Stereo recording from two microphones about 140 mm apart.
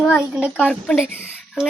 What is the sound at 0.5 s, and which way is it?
Speech, 10° left (ahead or behind).